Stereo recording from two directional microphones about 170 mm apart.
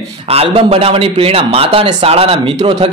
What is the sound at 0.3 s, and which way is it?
A man's voice, 35° right (ahead or behind).